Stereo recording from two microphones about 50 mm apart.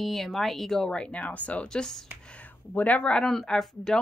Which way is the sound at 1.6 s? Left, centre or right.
Centre.